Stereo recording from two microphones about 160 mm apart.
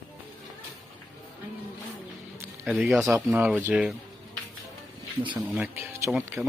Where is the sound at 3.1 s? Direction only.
10° right (ahead or behind).